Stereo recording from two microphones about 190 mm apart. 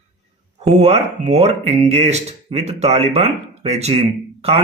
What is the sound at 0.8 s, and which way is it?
Speech, 35° right (ahead or behind).